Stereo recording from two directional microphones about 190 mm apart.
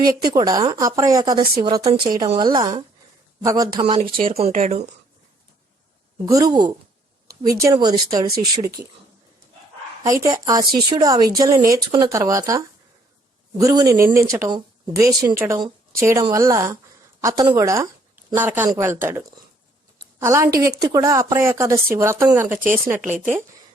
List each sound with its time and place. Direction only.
0.0 s a woman's voice: 20° right (ahead or behind)
4.3 s speech: 35° right (ahead or behind)
4.6 s speech: 45° right (ahead or behind)
6.3 s a woman's voice: 20° right (ahead or behind)
10.0 s a woman's voice: 15° right (ahead or behind)